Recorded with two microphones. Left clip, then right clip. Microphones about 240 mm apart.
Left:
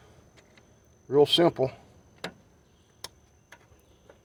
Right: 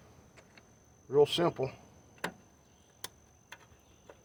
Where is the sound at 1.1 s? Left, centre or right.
Left.